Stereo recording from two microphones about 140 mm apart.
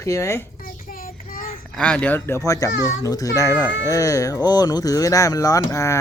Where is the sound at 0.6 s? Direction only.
85° left.